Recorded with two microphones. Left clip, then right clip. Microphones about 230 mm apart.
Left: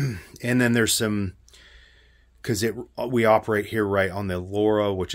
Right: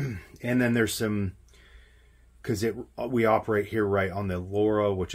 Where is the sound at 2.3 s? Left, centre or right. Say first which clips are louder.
Left 3 dB; left.